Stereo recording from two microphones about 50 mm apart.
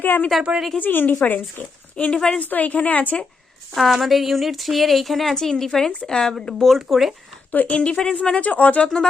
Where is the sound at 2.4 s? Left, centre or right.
Left.